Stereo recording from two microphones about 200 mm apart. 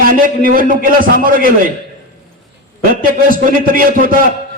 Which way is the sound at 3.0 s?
45° right (ahead or behind).